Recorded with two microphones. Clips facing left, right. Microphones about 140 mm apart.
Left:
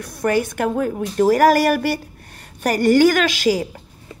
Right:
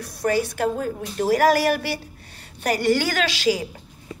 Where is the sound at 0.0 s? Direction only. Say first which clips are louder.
Left 3 dB; 55° left (ahead or behind).